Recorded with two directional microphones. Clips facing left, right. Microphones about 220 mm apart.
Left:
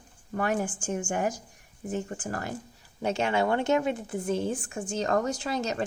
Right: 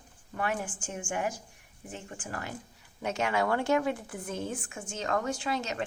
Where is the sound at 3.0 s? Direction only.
30° left (ahead or behind).